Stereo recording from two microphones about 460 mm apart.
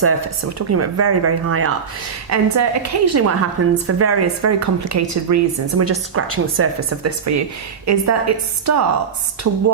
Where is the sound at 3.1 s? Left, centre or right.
Right.